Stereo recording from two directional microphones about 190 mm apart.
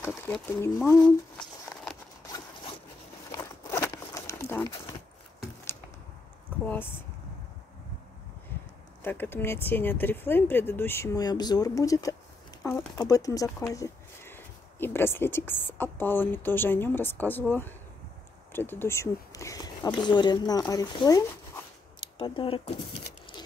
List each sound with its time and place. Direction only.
0.7 s speech: 5° left (ahead or behind)
3.3 s crumpling: 15° left (ahead or behind)
6.6 s speech: 10° left (ahead or behind)
9.0 s speech: 10° left (ahead or behind)
22.2 s speech: 30° left (ahead or behind)